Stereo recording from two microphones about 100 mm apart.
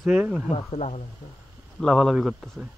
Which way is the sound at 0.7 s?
90° left.